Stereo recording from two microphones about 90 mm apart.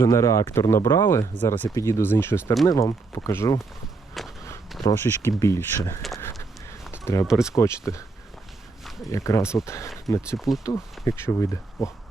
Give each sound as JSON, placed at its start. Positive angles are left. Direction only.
{"t": 0.0, "sound": "speech", "side_deg": 35}
{"t": 4.7, "sound": "a sound", "side_deg": 0}
{"t": 5.1, "sound": "speech", "side_deg": 45}
{"t": 5.4, "sound": "speech", "side_deg": 30}
{"t": 7.0, "sound": "speech", "side_deg": 35}
{"t": 7.3, "sound": "speech", "side_deg": -5}
{"t": 7.5, "sound": "speech", "side_deg": 35}
{"t": 9.0, "sound": "speech", "side_deg": 35}
{"t": 10.3, "sound": "speech", "side_deg": 0}
{"t": 10.6, "sound": "speech", "side_deg": 40}